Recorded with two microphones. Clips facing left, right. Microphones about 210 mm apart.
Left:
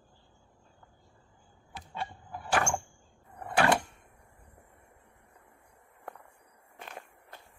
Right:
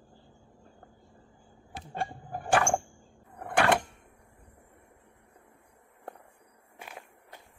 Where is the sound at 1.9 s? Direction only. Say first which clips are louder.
Right 4 dB; 50° right (ahead or behind).